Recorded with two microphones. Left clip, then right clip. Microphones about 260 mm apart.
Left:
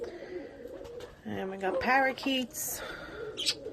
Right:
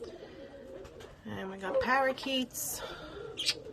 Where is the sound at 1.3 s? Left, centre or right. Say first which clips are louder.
Left 2 dB; centre.